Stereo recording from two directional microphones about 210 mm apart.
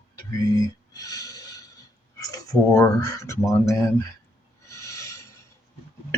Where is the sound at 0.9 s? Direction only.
15° left (ahead or behind).